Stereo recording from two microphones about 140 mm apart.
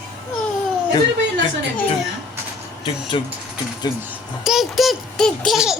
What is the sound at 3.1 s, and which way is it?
Speech, 40° left (ahead or behind).